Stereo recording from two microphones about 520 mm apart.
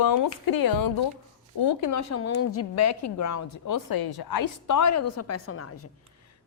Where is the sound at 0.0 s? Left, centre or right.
Left.